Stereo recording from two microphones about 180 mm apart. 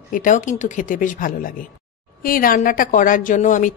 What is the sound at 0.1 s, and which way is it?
Speech, 45° left (ahead or behind).